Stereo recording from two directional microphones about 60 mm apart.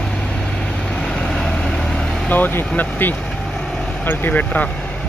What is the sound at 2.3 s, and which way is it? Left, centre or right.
Speech, left.